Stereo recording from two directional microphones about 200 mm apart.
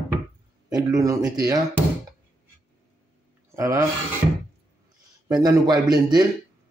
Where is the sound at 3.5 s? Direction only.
15° right (ahead or behind).